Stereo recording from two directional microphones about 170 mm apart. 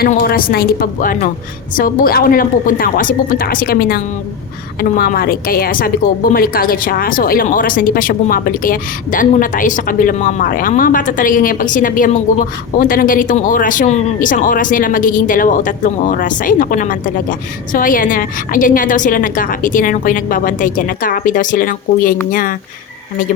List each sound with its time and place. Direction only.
0.1 s a woman's voice: 55° left (ahead or behind)